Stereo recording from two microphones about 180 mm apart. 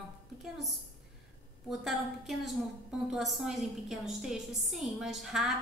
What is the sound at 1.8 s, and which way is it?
A woman's voice, centre (ahead or behind).